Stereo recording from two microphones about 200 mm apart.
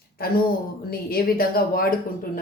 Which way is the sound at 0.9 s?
50° left (ahead or behind).